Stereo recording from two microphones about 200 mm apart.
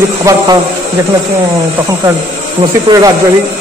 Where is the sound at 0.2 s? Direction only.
15° right (ahead or behind).